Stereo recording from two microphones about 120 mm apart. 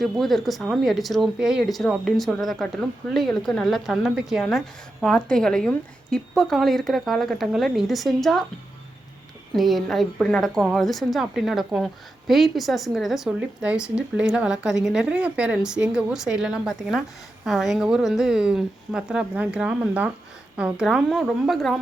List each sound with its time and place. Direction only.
0.0 s a woman's voice: centre (ahead or behind)
9.5 s a woman's voice: centre (ahead or behind)